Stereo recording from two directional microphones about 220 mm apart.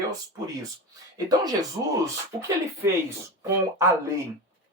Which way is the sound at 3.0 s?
15° right (ahead or behind).